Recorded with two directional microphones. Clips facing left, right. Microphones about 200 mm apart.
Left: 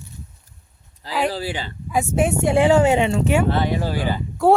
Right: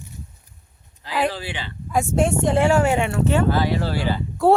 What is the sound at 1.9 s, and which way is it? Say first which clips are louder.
Speech: even; 5° left (ahead or behind).